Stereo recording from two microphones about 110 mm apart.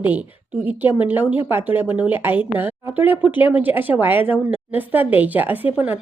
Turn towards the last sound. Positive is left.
turn(degrees=-15)  # may be behind; listen again after turning